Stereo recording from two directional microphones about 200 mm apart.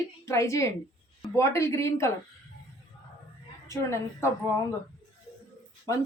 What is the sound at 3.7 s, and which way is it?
Speech, 15° left (ahead or behind).